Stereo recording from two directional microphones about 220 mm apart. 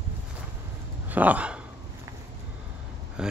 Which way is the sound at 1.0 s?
5° right (ahead or behind).